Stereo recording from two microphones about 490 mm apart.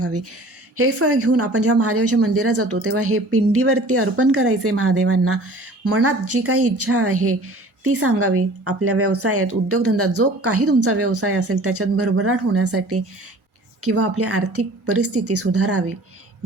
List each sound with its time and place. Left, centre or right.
0.0 s speech: right